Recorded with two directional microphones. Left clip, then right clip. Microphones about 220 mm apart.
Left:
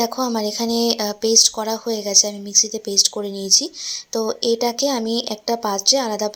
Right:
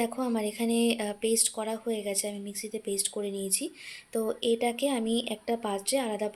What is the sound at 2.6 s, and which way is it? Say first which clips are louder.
Speech: left 19 dB; 20° left (ahead or behind).